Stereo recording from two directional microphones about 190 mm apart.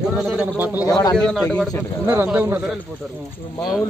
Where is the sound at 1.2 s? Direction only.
5° left (ahead or behind).